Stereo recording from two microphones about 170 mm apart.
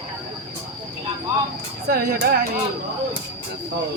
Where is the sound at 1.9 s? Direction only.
60° right (ahead or behind).